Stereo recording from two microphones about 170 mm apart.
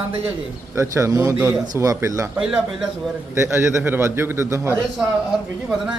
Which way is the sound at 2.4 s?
5° right (ahead or behind).